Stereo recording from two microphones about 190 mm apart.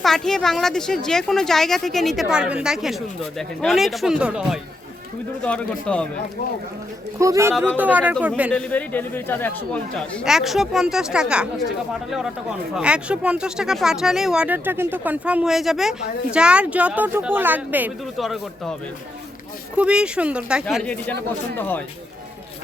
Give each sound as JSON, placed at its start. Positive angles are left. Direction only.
{"t": 0.0, "sound": "a woman's voice", "side_deg": 0}
{"t": 5.4, "sound": "speech", "side_deg": 5}
{"t": 7.2, "sound": "speech", "side_deg": -15}
{"t": 8.1, "sound": "a woman's voice", "side_deg": 5}
{"t": 12.7, "sound": "a woman's voice", "side_deg": -5}
{"t": 19.7, "sound": "a woman's voice", "side_deg": -5}